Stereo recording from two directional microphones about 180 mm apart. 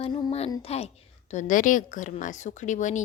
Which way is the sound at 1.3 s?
45° left (ahead or behind).